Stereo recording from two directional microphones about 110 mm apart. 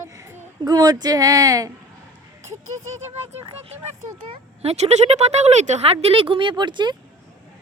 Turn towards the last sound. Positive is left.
turn(degrees=-45)  # may be behind; listen again after turning